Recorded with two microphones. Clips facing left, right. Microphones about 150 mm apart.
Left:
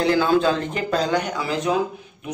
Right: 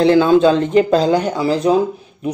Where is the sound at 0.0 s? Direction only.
20° right (ahead or behind).